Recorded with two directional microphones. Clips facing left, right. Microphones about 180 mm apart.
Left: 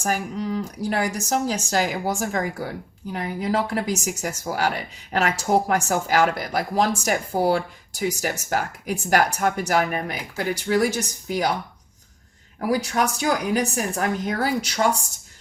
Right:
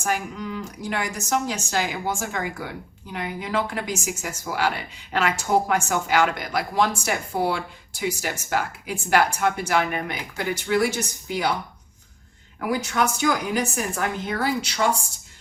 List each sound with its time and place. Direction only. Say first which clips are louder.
0.0 s speech: left 2 dB; 35° left (ahead or behind)
12.5 s speech: left 2 dB; 35° left (ahead or behind)